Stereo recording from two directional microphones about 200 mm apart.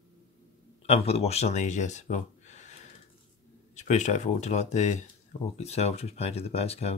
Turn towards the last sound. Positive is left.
turn(degrees=30)  # may be behind; listen again after turning